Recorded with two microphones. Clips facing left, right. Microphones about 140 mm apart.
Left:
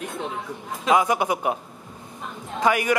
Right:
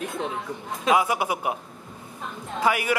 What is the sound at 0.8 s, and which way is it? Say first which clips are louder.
Speech: left 2 dB; 5° right (ahead or behind).